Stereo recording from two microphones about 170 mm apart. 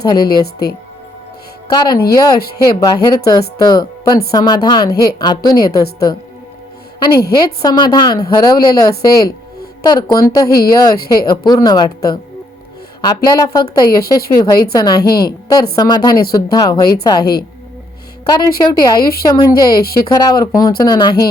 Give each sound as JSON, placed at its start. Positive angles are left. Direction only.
{"t": 0.0, "sound": "a woman's voice", "side_deg": 25}
{"t": 1.7, "sound": "a woman's voice", "side_deg": 25}
{"t": 7.3, "sound": "a woman's voice", "side_deg": 20}